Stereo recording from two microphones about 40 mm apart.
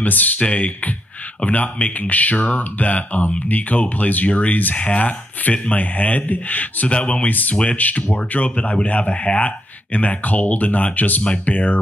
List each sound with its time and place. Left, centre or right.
0.0 s speech: left
0.4 s speech: left
6.9 s speech: left